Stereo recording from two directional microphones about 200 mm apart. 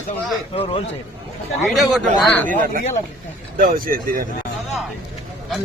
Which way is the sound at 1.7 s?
Centre (ahead or behind).